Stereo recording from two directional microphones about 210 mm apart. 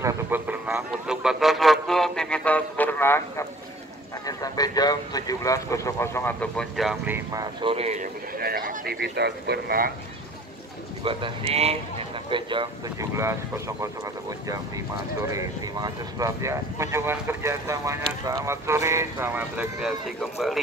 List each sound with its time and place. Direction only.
0.0 s a sound: 10° right (ahead or behind); by 3.4 s 10° left (ahead or behind)
4.3 s speech: 20° left (ahead or behind); by 7.2 s centre (ahead or behind)
7.3 s speech: 25° right (ahead or behind)
8.4 s speech: 45° right (ahead or behind)
11.1 s speech: 25° right (ahead or behind)
15.2 s speech: 15° right (ahead or behind)